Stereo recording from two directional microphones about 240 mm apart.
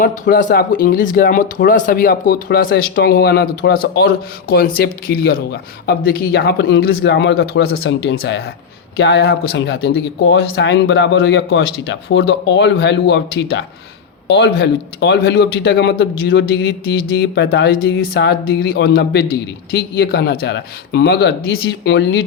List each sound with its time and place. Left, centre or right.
0.3 s speech: left